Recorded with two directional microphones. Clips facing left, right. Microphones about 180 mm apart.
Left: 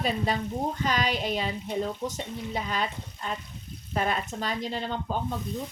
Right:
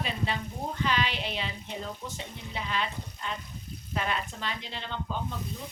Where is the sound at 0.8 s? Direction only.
45° left (ahead or behind).